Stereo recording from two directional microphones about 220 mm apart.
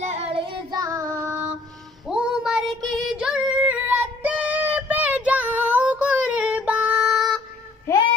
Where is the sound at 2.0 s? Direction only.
5° right (ahead or behind).